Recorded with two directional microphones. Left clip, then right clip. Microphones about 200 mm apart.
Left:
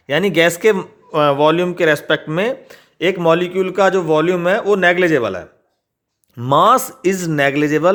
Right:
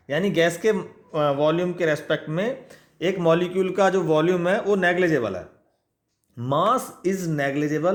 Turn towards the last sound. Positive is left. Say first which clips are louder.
# left 9 dB
turn(degrees=35)  # may be behind; listen again after turning